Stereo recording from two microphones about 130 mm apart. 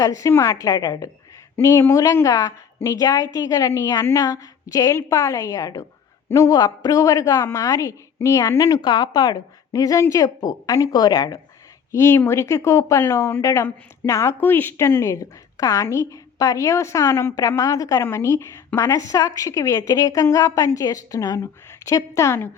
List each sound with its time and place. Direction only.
0.0 s speech: 25° left (ahead or behind)